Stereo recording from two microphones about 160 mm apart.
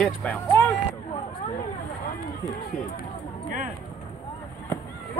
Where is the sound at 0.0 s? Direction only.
5° left (ahead or behind).